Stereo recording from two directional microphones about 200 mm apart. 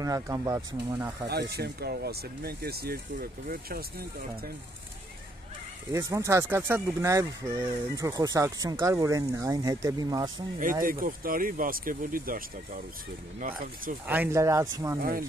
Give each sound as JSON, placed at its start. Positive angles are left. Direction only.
{"t": 0.0, "sound": "speech", "side_deg": -15}
{"t": 1.5, "sound": "speech", "side_deg": -55}
{"t": 5.9, "sound": "speech", "side_deg": -15}
{"t": 10.9, "sound": "speech", "side_deg": -45}
{"t": 14.0, "sound": "speech", "side_deg": -10}
{"t": 15.0, "sound": "speech", "side_deg": -50}